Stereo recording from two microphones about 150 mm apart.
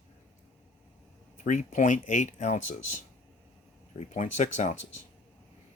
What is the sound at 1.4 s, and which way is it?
Speech, 60° left (ahead or behind).